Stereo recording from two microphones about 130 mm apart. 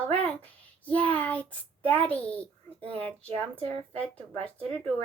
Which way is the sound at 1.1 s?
10° left (ahead or behind).